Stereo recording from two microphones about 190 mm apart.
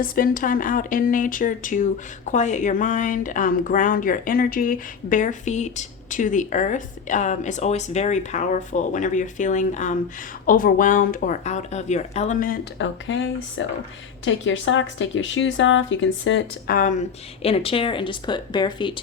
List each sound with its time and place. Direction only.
0.0 s speech: 50° left (ahead or behind)
12.8 s speech: 90° left
16.6 s speech: 45° left (ahead or behind); by 18.9 s 25° left (ahead or behind)